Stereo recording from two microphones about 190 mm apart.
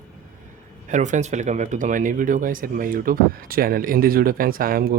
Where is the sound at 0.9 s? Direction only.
40° right (ahead or behind).